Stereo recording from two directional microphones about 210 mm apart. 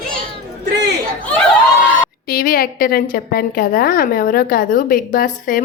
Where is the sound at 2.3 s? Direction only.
45° left (ahead or behind).